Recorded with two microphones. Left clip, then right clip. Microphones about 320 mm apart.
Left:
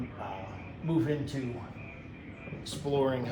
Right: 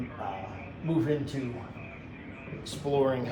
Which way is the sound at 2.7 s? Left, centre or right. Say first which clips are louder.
Right 2 dB; centre.